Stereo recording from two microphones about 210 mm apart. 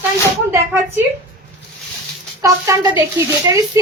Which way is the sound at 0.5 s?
10° right (ahead or behind).